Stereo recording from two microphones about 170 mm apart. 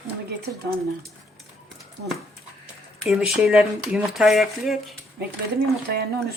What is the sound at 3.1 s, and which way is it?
Speech, 5° right (ahead or behind).